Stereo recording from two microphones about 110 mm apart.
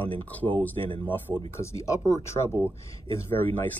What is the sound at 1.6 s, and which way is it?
Speech, 25° left (ahead or behind).